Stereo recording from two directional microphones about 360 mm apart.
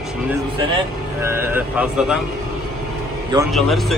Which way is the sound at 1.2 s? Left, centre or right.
Centre.